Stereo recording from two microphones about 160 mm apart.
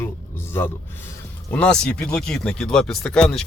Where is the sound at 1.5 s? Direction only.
5° left (ahead or behind).